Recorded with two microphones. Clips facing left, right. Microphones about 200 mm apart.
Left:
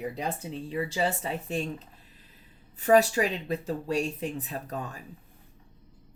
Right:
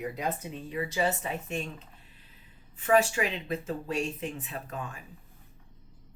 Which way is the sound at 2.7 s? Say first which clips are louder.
Left 3 dB; 35° left (ahead or behind).